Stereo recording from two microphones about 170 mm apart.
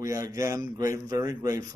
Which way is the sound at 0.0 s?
20° right (ahead or behind).